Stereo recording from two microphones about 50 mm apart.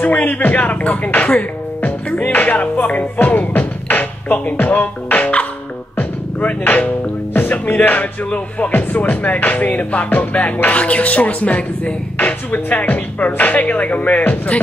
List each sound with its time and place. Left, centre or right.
0.0 s speech: left
2.3 s music: left
8.3 s speech: left
9.4 s music: left